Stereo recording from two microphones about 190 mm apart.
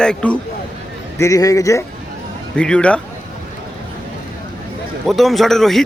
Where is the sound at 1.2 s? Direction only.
15° left (ahead or behind).